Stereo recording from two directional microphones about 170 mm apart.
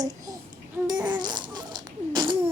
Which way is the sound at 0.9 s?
25° right (ahead or behind).